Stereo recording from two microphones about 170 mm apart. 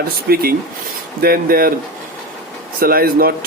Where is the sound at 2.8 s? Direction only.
60° right (ahead or behind).